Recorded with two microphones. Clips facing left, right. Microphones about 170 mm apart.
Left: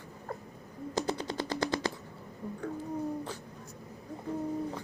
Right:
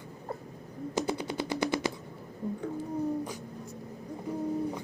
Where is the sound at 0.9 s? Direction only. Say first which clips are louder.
Right 1 dB; 10° right (ahead or behind).